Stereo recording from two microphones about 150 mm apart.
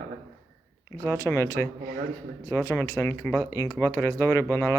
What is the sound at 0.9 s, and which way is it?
Speech, 20° left (ahead or behind).